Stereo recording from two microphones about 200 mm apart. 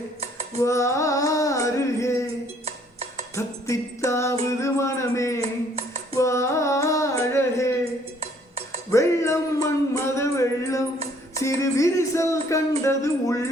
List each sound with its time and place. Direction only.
0.2 s dishes: 35° right (ahead or behind)
0.6 s music: 15° left (ahead or behind)
2.6 s music: 30° right (ahead or behind)
3.3 s music: 15° left (ahead or behind)
4.6 s a sound: 15° left (ahead or behind)
8.2 s dishes: 30° right (ahead or behind)
8.9 s music: 15° left (ahead or behind)
11.3 s speech: 15° left (ahead or behind)